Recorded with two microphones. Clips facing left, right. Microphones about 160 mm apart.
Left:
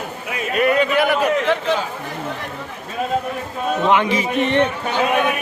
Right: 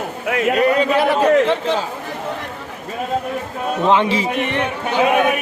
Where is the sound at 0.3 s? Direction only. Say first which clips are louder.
Right 10 dB; 80° right.